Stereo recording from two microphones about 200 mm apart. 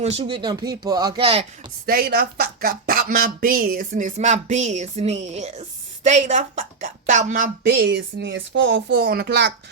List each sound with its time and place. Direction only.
0.0 s speech: 30° right (ahead or behind)
1.9 s speech: 50° right (ahead or behind)
7.8 s speech: 60° right (ahead or behind)